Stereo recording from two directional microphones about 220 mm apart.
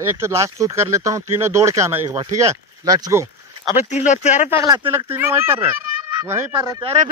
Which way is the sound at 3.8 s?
35° left (ahead or behind).